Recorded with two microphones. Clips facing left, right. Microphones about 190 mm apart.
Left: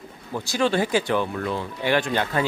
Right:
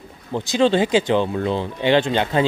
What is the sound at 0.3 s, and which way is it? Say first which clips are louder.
Speech: right 5 dB; 20° right (ahead or behind).